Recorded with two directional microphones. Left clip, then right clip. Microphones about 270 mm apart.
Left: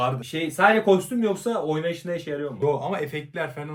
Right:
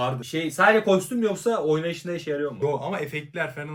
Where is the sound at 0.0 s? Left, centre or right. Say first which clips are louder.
Left 1 dB; centre.